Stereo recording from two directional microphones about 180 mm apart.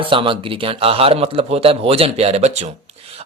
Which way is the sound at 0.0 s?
30° right (ahead or behind).